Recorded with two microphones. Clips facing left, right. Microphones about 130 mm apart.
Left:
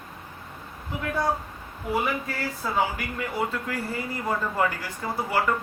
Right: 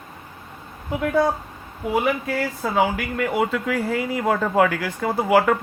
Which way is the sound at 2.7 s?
80° right.